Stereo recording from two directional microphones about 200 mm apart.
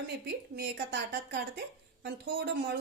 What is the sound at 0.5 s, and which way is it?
Speech, 60° right (ahead or behind).